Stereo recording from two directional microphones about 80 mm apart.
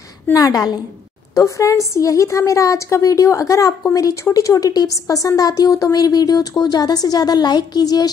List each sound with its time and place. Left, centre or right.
0.3 s speech: left
1.3 s speech: left